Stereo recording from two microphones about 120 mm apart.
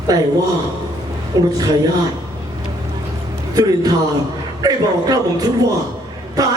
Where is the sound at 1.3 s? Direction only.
30° right (ahead or behind).